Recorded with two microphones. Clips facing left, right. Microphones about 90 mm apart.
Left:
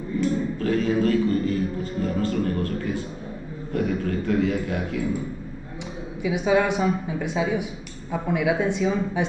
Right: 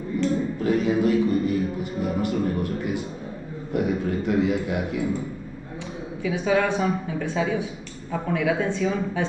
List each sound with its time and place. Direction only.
0.6 s music: 15° right (ahead or behind)
3.7 s a sound: 20° right (ahead or behind)
6.2 s a woman's voice: 15° left (ahead or behind)